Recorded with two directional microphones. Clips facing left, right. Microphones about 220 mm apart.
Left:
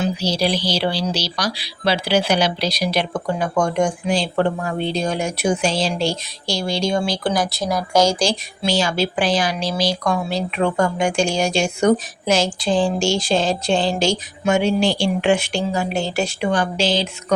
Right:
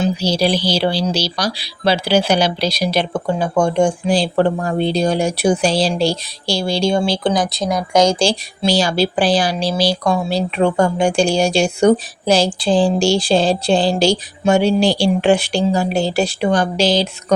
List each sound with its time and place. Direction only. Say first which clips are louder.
0.2 s speech: right 4 dB; 30° right (ahead or behind)
8.2 s speech: right 4 dB; 30° right (ahead or behind)